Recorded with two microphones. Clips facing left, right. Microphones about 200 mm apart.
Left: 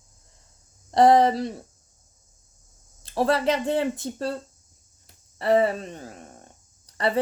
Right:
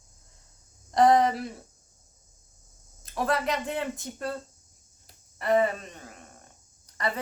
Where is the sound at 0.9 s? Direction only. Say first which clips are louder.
Left 4 dB; 30° left (ahead or behind).